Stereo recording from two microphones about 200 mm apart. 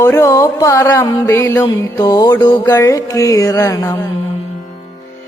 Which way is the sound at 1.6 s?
20° left (ahead or behind).